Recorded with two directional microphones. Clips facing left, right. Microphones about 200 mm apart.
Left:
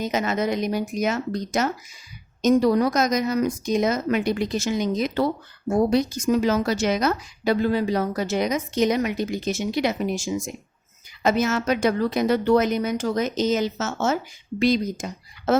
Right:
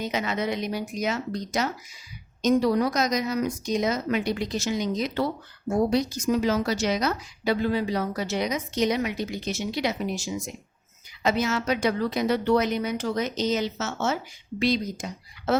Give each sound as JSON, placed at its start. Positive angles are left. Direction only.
{"t": 0.0, "sound": "a woman's voice", "side_deg": 45}